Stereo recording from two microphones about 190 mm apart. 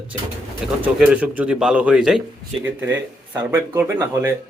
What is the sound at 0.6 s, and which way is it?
Speech, 5° right (ahead or behind).